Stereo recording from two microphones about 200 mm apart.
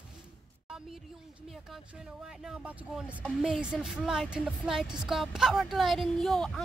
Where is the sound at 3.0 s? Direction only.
Centre (ahead or behind).